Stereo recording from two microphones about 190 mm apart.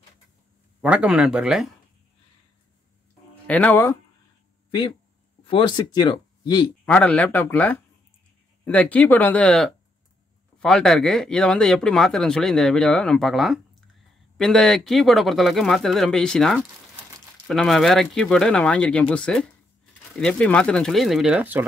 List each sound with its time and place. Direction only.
0.7 s speech: 5° right (ahead or behind)
3.4 s speech: 10° left (ahead or behind)
4.6 s speech: 25° left (ahead or behind)
6.9 s speech: 5° left (ahead or behind); by 21.6 s 10° right (ahead or behind)